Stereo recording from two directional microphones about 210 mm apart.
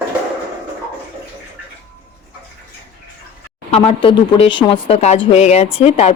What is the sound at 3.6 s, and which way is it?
A woman's voice, 25° left (ahead or behind).